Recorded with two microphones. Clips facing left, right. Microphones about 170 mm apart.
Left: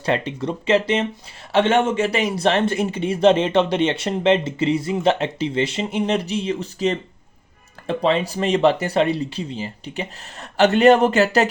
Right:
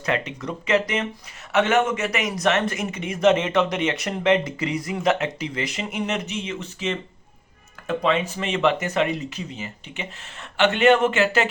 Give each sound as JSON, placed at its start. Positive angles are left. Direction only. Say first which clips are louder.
{"t": 0.0, "sound": "speech", "louder": "left 4 dB", "side_deg": 30}